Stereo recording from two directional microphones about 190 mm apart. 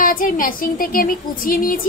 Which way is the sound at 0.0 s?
45° left (ahead or behind).